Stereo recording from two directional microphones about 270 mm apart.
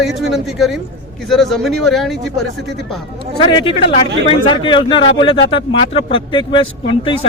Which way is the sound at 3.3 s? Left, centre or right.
Centre.